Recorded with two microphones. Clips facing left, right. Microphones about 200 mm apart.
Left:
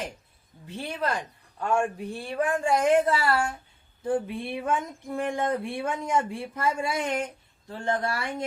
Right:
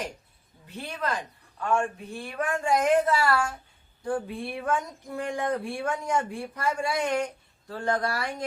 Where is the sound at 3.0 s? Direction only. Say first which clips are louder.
Even; 25° left (ahead or behind).